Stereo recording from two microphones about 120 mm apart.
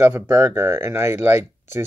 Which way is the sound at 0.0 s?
25° right (ahead or behind).